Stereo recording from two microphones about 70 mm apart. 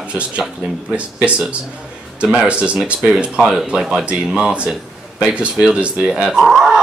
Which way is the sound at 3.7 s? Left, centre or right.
Centre.